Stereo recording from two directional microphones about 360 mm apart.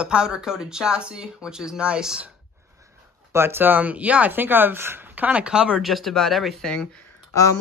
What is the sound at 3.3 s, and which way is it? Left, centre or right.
Speech, centre.